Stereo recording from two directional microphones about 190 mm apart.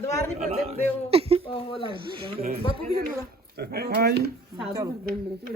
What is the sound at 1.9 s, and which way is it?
Speech, 25° right (ahead or behind).